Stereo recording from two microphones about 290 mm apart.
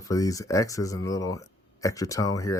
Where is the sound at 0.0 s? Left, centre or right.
Centre.